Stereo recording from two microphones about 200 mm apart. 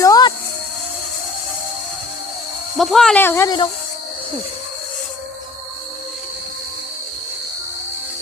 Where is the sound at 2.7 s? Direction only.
Centre (ahead or behind); by 3.7 s 20° left (ahead or behind).